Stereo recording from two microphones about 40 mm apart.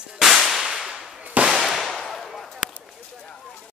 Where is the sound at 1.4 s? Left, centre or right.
Centre.